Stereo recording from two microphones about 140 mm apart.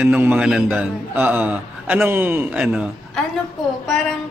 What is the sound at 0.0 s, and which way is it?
A man's voice, 15° right (ahead or behind).